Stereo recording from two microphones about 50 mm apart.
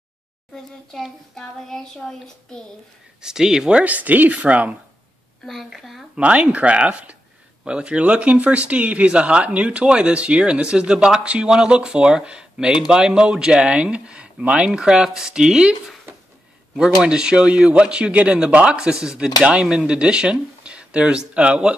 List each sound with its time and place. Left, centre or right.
1.3 s child singing: centre
3.2 s speech: centre
3.8 s speech: right
5.4 s a woman's voice: centre
6.1 s speech: right
17.0 s speech: centre
18.8 s speech: centre